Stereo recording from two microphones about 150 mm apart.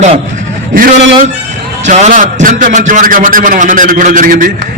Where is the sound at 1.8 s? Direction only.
55° right (ahead or behind).